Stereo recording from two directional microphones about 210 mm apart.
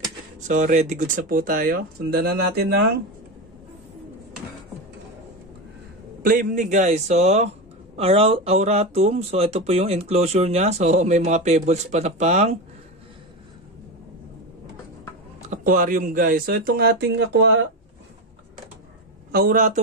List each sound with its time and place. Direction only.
0.5 s speech: 35° right (ahead or behind)
6.2 s speech: 40° right (ahead or behind)
15.5 s speech: 40° right (ahead or behind); by 17.6 s 55° right (ahead or behind)
19.3 s speech: 45° right (ahead or behind)